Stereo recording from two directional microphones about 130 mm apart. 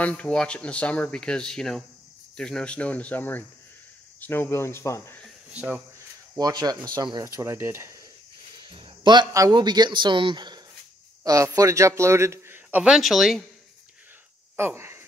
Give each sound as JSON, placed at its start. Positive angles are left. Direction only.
{"t": 0.0, "sound": "speech", "side_deg": 10}
{"t": 5.5, "sound": "speech", "side_deg": -10}
{"t": 6.3, "sound": "a man's voice", "side_deg": -30}
{"t": 8.6, "sound": "a man's voice", "side_deg": -40}
{"t": 14.6, "sound": "speech", "side_deg": -20}